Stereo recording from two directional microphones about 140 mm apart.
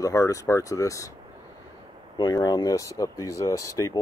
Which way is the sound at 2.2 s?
25° left (ahead or behind).